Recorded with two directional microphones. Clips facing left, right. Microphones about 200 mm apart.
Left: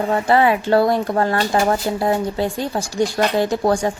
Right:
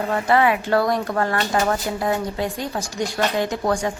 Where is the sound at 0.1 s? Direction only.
30° left (ahead or behind).